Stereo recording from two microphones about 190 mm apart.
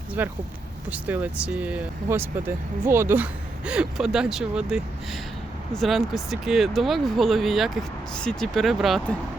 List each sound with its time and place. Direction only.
0.2 s speech: 10° right (ahead or behind)